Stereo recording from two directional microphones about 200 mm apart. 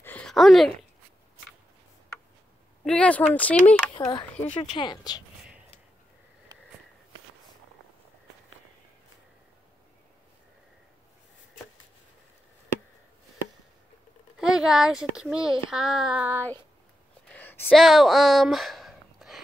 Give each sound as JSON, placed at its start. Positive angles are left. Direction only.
{"t": 0.0, "sound": "a sound", "side_deg": 5}
{"t": 2.8, "sound": "speech", "side_deg": 5}
{"t": 3.6, "sound": "speech", "side_deg": 25}
{"t": 14.4, "sound": "a child's voice", "side_deg": -5}
{"t": 17.3, "sound": "a sound", "side_deg": 10}
{"t": 17.6, "sound": "speech", "side_deg": 0}